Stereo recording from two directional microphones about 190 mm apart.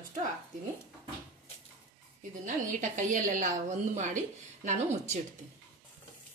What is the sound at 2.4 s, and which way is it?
A woman's voice, 40° right (ahead or behind).